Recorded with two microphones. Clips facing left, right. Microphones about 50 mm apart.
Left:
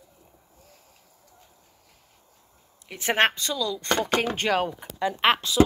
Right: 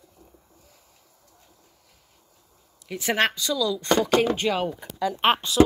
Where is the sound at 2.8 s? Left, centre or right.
Left.